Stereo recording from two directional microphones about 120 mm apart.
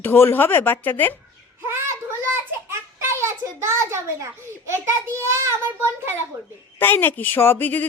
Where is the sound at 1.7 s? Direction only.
20° right (ahead or behind).